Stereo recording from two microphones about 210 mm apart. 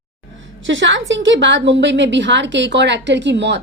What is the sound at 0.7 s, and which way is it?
A woman's voice, 60° right (ahead or behind).